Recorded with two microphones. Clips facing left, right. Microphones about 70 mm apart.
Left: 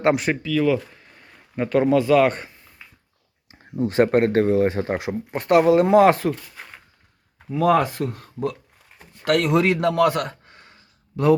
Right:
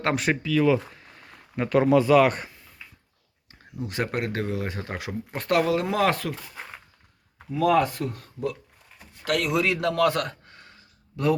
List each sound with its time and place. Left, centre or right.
0.2 s speech: centre
3.5 s a sound: centre
3.8 s speech: left
7.5 s speech: left
7.8 s speech: left
9.0 s speech: left
9.8 s speech: centre